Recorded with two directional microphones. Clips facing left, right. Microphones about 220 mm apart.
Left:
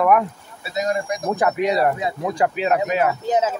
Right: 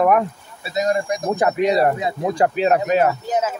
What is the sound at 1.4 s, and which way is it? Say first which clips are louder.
Speech: right 2 dB; 25° right (ahead or behind).